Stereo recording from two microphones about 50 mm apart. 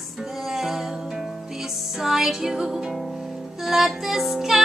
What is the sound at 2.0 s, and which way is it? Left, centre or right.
Music, centre.